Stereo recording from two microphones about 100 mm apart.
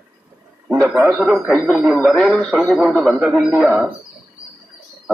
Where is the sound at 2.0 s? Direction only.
Centre (ahead or behind).